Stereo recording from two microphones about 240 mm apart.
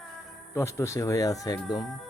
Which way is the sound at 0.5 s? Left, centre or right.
Centre.